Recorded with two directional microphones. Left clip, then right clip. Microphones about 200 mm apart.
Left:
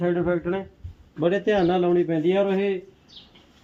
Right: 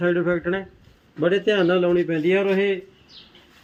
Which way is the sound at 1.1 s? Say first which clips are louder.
Right 2 dB; 30° left (ahead or behind).